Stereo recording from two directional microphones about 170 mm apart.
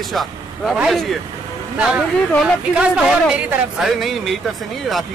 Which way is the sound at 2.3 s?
Centre (ahead or behind).